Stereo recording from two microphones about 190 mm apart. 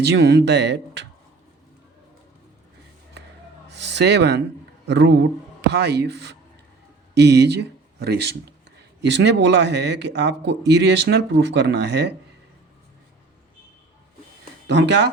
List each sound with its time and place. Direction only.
0.0 s speech: 60° right (ahead or behind)
3.7 s a sound: 65° right (ahead or behind)
4.9 s speech: 65° right (ahead or behind)
14.7 s speech: 65° right (ahead or behind)